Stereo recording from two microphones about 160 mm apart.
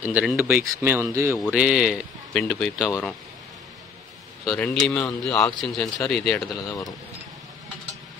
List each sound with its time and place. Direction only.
0.0 s speech: 5° right (ahead or behind)
1.4 s a man's voice: 5° right (ahead or behind)
4.5 s a man's voice: 5° left (ahead or behind)